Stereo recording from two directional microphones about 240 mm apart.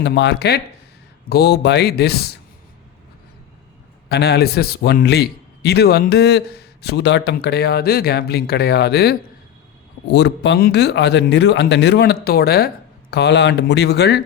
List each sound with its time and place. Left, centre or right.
0.0 s a man's voice: left
4.1 s a man's voice: left